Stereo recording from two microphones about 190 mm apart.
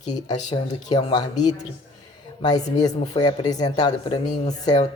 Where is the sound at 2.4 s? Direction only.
20° left (ahead or behind).